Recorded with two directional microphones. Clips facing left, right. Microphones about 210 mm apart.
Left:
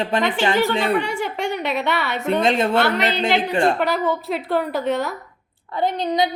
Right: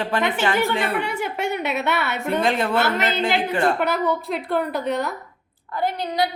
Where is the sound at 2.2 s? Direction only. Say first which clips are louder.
Left 4 dB; 20° left (ahead or behind).